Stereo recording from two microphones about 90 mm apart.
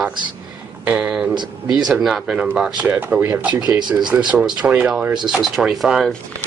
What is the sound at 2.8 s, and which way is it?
Speech, 15° right (ahead or behind).